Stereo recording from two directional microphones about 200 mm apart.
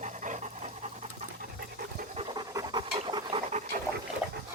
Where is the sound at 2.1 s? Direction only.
20° right (ahead or behind).